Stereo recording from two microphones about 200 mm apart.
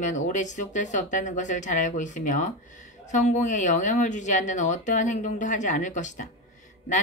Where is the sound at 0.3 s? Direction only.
40° left (ahead or behind).